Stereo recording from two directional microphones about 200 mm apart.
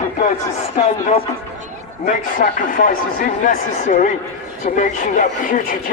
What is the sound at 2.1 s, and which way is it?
Speech, 40° left (ahead or behind).